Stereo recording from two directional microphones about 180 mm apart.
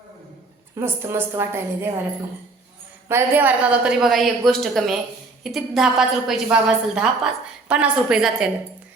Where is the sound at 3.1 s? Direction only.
10° right (ahead or behind).